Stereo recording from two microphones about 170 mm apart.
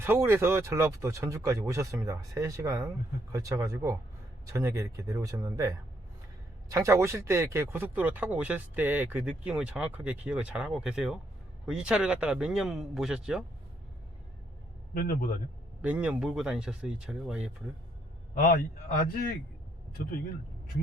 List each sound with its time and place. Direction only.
0.0 s speech: 15° right (ahead or behind)
15.8 s speech: 5° right (ahead or behind)
18.3 s a man's voice: 55° left (ahead or behind)